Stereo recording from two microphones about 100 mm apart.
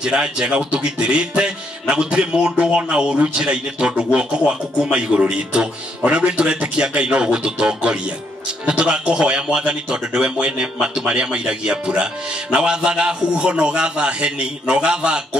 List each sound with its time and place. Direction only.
0.0 s a man's voice: 10° right (ahead or behind)